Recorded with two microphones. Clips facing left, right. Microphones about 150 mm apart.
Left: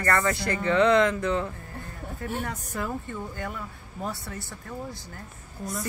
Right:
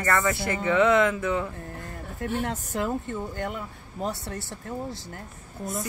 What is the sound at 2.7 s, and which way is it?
Speech, 20° right (ahead or behind).